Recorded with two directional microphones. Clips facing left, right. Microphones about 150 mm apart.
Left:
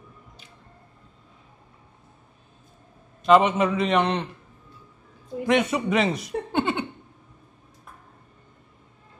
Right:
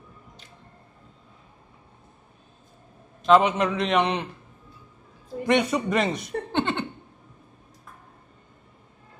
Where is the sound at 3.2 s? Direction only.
Centre (ahead or behind).